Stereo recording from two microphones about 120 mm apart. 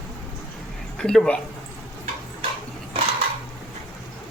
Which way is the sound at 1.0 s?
5° left (ahead or behind).